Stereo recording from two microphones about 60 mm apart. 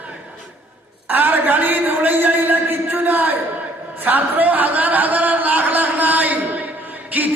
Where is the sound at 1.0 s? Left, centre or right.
Right.